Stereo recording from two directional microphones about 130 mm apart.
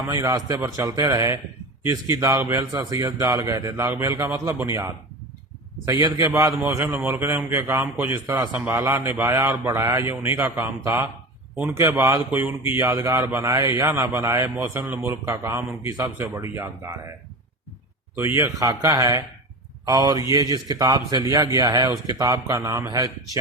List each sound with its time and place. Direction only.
0.1 s a man's voice: 25° right (ahead or behind)
18.2 s a man's voice: 20° right (ahead or behind)